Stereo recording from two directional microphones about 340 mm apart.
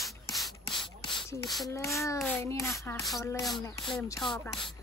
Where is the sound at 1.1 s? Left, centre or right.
Centre.